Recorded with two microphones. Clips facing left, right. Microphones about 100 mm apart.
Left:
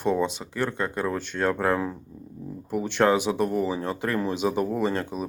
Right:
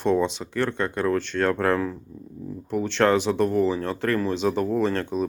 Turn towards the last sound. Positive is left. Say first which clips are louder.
# right 3 dB
turn(degrees=10)  # may be behind; listen again after turning